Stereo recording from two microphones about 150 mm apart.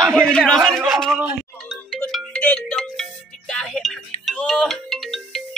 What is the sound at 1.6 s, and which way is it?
Music, centre (ahead or behind).